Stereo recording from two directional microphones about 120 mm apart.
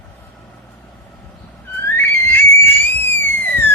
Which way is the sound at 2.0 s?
15° left (ahead or behind).